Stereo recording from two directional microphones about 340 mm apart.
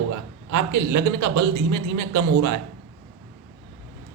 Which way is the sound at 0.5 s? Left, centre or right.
Right.